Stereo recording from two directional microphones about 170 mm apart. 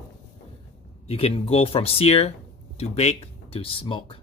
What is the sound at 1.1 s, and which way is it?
Speech, 35° left (ahead or behind).